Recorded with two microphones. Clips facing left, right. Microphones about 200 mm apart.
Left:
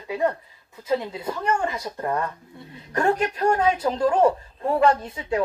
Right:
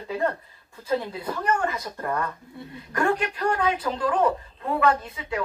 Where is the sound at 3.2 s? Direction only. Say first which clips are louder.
Left 4 dB; 25° left (ahead or behind).